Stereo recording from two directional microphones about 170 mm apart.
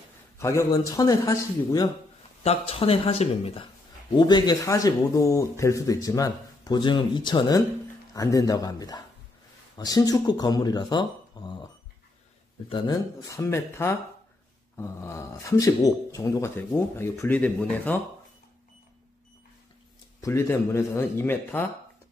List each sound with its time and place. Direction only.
0.4 s speech: 15° left (ahead or behind)
2.4 s speech: 35° left (ahead or behind); by 18.0 s 10° left (ahead or behind)
20.2 s speech: 15° left (ahead or behind)